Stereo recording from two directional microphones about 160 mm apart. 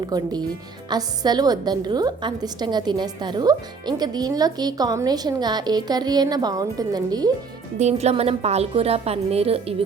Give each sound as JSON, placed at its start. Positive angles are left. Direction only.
{"t": 0.1, "sound": "a woman's voice", "side_deg": -25}
{"t": 7.8, "sound": "a woman's voice", "side_deg": -45}